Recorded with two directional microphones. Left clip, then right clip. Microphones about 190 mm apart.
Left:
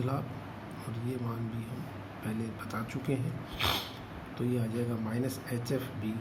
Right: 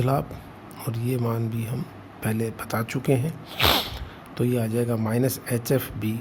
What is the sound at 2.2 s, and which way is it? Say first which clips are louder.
Speech: right 11 dB; 60° right (ahead or behind).